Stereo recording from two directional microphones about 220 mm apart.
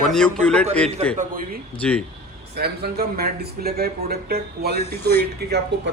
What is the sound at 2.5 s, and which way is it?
Speech, 45° right (ahead or behind).